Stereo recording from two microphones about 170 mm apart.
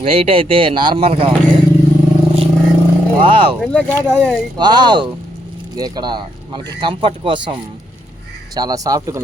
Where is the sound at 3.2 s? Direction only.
30° right (ahead or behind).